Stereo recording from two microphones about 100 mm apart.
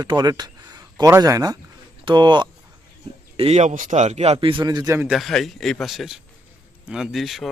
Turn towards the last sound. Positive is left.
turn(degrees=0)  # may be behind; listen again after turning